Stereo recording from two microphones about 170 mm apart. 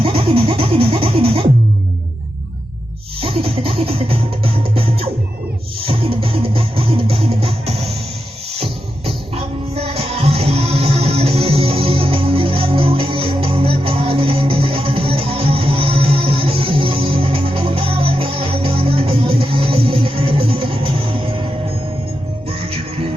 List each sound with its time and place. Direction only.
0.0 s music: 35° right (ahead or behind)
3.2 s music: 35° right (ahead or behind)